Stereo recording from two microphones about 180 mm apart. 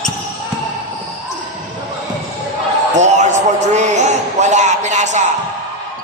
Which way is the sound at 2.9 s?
40° right (ahead or behind).